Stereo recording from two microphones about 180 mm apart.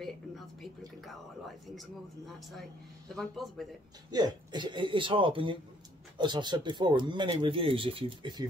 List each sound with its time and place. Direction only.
1.8 s speech: centre (ahead or behind)
4.1 s speech: 25° right (ahead or behind)